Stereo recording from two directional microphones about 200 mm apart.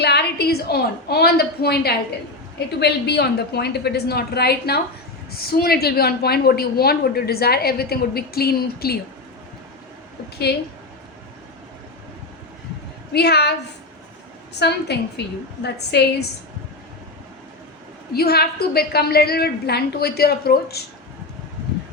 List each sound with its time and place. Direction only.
0.0 s a sound: 55° left (ahead or behind)
2.8 s a woman's voice: 55° left (ahead or behind)
10.5 s a woman's voice: 55° left (ahead or behind)
13.1 s a woman's voice: 55° left (ahead or behind)
14.9 s a woman's voice: 55° left (ahead or behind)
18.1 s a woman's voice: 50° left (ahead or behind)